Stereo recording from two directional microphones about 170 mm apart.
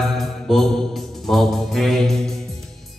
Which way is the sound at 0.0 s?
Centre (ahead or behind).